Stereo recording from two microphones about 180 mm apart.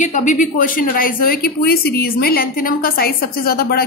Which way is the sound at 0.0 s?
45° left (ahead or behind).